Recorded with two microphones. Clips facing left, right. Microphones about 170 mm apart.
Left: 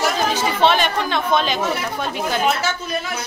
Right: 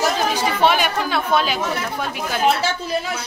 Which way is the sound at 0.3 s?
10° right (ahead or behind).